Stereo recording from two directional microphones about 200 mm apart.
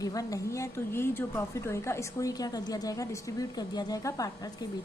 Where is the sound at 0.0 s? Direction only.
20° left (ahead or behind).